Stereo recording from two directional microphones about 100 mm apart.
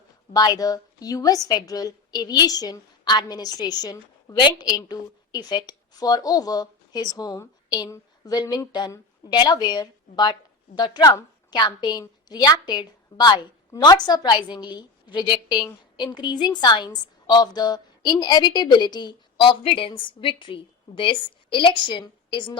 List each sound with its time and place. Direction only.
0.3 s a woman's voice: 40° left (ahead or behind)
4.7 s a woman's voice: 40° left (ahead or behind)